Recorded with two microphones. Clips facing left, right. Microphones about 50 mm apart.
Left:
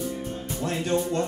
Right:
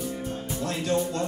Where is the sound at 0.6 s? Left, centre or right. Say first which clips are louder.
Left 1 dB; left.